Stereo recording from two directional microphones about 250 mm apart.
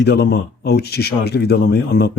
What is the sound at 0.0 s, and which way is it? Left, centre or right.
Speech, left.